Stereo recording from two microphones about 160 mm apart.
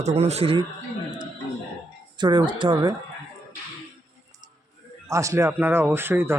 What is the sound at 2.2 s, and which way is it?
Speech, 25° right (ahead or behind).